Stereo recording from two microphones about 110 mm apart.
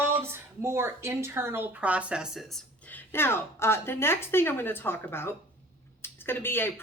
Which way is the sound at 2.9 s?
20° left (ahead or behind).